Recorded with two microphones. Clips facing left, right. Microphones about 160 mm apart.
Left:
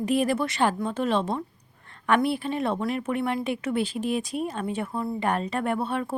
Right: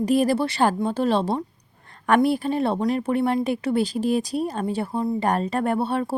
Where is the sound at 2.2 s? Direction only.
40° right (ahead or behind).